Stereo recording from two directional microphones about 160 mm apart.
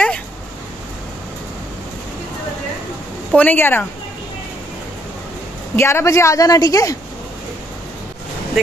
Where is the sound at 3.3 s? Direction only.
10° left (ahead or behind).